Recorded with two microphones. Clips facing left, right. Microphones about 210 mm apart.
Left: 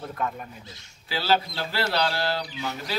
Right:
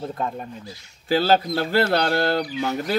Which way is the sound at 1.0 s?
50° right (ahead or behind).